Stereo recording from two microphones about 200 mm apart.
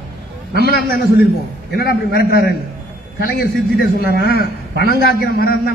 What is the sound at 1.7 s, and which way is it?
Speech, 50° left (ahead or behind).